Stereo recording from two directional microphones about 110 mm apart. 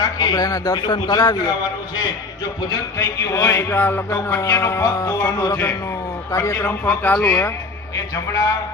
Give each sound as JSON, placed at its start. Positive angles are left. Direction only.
{"t": 0.0, "sound": "a man's voice", "side_deg": 35}
{"t": 7.9, "sound": "a man's voice", "side_deg": 35}